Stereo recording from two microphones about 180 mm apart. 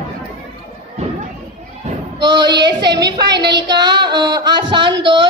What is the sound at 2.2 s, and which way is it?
Speech, 25° right (ahead or behind).